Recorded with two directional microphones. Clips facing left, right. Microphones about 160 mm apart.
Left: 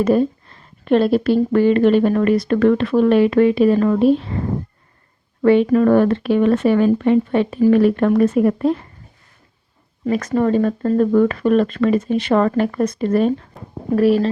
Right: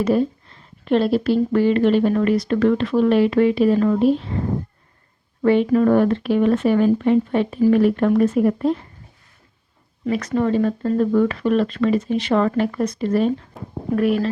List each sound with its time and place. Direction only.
0.9 s speech: 50° left (ahead or behind)
5.4 s speech: 70° left (ahead or behind)
10.1 s speech: 45° left (ahead or behind)
13.5 s speech: centre (ahead or behind)
13.9 s speech: 35° left (ahead or behind)